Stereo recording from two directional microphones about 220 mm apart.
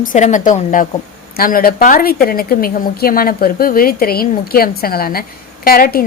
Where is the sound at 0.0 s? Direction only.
35° left (ahead or behind).